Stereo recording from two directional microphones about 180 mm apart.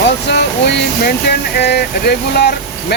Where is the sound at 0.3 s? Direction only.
70° left (ahead or behind).